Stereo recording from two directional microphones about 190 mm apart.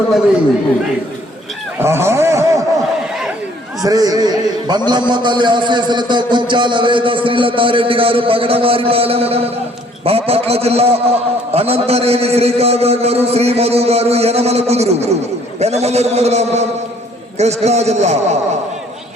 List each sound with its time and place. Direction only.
1.8 s speech: 15° right (ahead or behind)
3.8 s a man's voice: 20° right (ahead or behind); by 18.3 s 35° right (ahead or behind)